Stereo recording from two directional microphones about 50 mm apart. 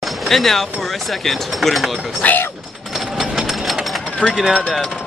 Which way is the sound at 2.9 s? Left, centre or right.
Centre.